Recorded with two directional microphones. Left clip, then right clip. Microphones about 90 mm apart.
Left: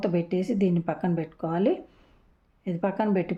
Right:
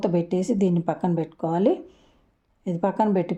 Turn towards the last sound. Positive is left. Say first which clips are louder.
# right 4 dB
turn(degrees=-25)  # may be behind; listen again after turning